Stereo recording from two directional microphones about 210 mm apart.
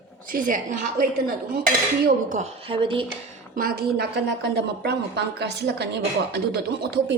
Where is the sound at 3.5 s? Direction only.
45° right (ahead or behind).